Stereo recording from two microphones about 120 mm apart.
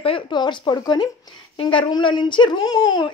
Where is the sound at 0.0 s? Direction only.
45° left (ahead or behind).